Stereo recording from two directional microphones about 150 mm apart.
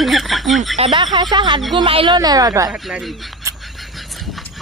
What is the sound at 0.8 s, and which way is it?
A woman's voice, 35° right (ahead or behind).